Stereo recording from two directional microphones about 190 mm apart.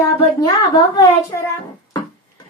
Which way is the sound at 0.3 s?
20° left (ahead or behind).